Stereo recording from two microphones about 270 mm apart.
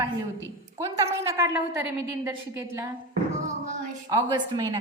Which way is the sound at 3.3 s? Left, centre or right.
Right.